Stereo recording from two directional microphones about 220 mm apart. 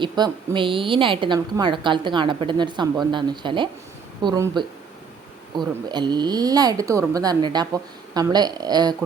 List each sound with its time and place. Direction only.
0.0 s a woman's voice: 20° right (ahead or behind)